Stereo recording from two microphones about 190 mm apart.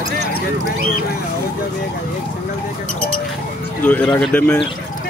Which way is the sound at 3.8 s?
10° left (ahead or behind).